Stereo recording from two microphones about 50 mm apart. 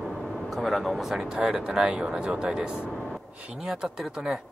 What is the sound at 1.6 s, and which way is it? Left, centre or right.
Speech, centre.